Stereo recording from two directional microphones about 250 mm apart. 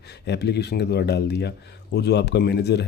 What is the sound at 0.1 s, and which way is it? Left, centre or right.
A man's voice, left.